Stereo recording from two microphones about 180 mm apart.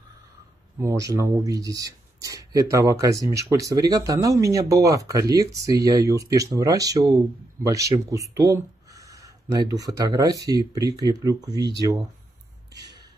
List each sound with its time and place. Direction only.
0.7 s speech: 15° right (ahead or behind)